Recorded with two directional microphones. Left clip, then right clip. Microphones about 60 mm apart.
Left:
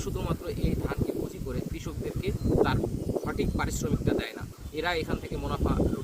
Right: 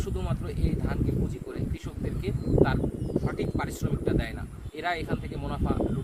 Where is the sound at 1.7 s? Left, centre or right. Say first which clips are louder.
Left 1 dB; right.